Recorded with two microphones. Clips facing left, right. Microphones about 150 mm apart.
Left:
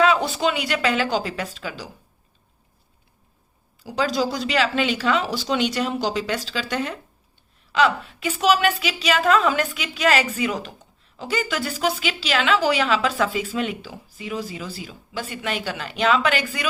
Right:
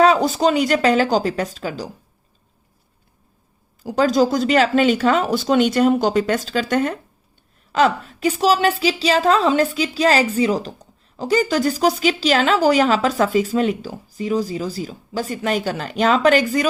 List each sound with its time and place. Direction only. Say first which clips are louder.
0.0 s a woman's voice: right 5 dB; 40° right (ahead or behind)
3.8 s a woman's voice: right 7 dB; 45° right (ahead or behind)